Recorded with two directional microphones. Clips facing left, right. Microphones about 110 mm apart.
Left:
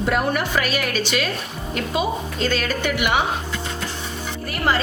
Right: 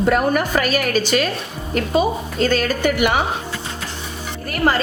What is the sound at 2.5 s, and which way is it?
Speech, 45° right (ahead or behind).